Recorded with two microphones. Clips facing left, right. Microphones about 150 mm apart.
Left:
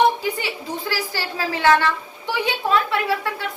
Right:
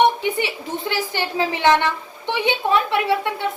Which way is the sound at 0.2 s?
25° right (ahead or behind).